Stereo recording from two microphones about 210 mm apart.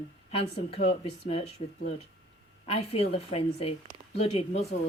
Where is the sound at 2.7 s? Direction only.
30° left (ahead or behind).